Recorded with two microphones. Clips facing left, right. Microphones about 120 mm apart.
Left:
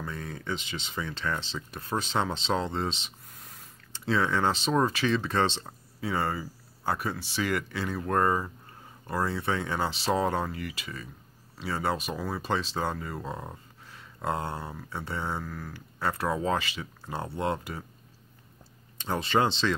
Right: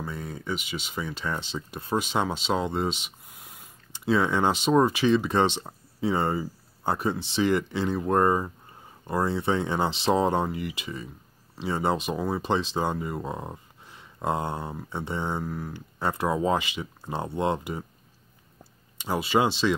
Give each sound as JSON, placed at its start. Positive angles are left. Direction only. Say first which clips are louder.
{"t": 0.0, "sound": "speech", "louder": "right 2 dB", "side_deg": -15}
{"t": 18.9, "sound": "speech", "louder": "right 2 dB", "side_deg": -10}